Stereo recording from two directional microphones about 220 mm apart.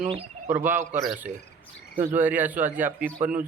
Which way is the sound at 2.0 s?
10° right (ahead or behind).